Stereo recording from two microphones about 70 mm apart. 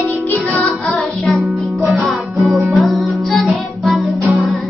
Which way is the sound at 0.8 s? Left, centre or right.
Centre.